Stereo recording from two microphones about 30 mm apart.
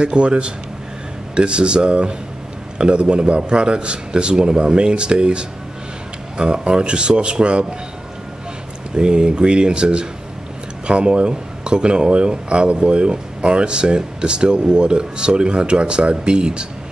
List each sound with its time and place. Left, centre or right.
0.0 s speech: right
8.9 s speech: right